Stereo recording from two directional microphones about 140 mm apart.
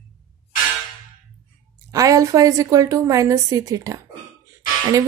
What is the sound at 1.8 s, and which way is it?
A woman's voice, 25° right (ahead or behind).